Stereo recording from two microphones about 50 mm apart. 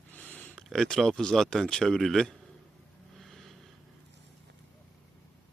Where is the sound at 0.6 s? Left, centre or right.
Centre.